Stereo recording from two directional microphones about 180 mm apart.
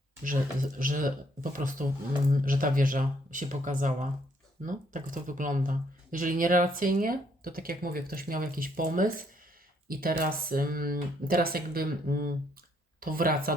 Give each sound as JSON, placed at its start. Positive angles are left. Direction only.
{"t": 0.3, "sound": "speech", "side_deg": -50}